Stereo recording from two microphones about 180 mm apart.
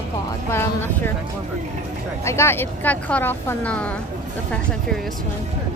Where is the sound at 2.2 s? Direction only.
15° left (ahead or behind).